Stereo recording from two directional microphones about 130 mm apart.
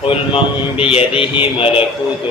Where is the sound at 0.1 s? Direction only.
45° left (ahead or behind).